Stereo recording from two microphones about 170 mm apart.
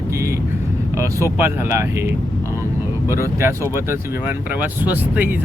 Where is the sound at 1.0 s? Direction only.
15° right (ahead or behind).